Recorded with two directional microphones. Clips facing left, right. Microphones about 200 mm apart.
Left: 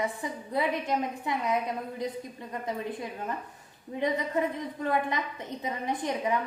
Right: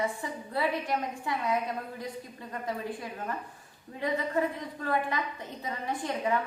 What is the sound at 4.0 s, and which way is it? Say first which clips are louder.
Speech: left 1 dB; 20° left (ahead or behind).